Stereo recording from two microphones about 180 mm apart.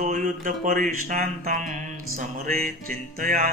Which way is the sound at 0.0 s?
45° right (ahead or behind).